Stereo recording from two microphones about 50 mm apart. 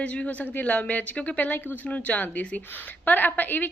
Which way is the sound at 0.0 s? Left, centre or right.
Left.